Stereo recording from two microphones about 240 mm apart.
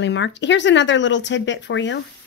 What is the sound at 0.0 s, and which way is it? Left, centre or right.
A woman's voice, left.